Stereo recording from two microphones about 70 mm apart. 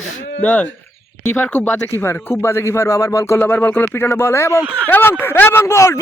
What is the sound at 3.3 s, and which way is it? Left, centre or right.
Speech, left.